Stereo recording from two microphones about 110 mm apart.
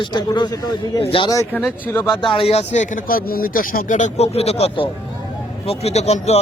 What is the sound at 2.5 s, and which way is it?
Speech, 80° left.